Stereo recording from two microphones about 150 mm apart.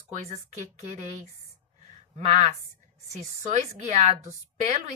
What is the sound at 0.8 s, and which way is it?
Speech, 50° right (ahead or behind).